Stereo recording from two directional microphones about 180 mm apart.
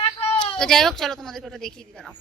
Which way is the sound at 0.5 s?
5° left (ahead or behind).